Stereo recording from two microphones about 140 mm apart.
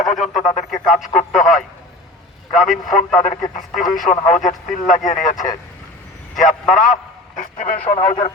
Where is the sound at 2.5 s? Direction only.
Centre (ahead or behind).